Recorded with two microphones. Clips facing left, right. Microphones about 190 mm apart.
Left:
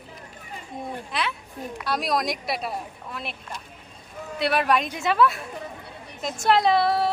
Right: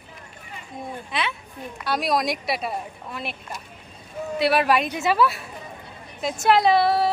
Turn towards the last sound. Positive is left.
turn(degrees=0)  # may be behind; listen again after turning